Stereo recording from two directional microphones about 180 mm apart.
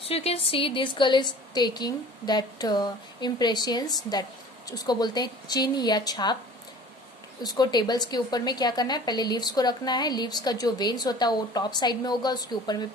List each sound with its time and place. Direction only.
0.0 s a woman's voice: 35° left (ahead or behind)
7.4 s a woman's voice: 20° left (ahead or behind)